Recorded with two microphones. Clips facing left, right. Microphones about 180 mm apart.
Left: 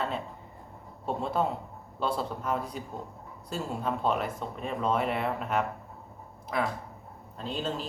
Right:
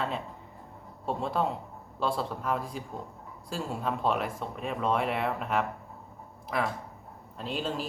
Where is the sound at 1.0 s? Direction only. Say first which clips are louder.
Even; centre (ahead or behind).